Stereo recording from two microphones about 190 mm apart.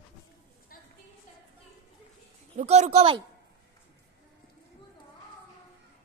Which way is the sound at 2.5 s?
35° right (ahead or behind).